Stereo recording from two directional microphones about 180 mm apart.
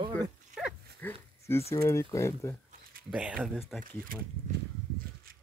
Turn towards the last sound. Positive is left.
turn(degrees=-5)  # may be behind; listen again after turning